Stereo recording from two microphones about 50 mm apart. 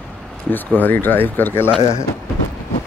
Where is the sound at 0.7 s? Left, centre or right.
Left.